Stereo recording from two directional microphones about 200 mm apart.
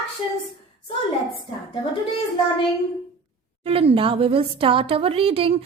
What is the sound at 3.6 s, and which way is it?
A woman's voice, 30° right (ahead or behind).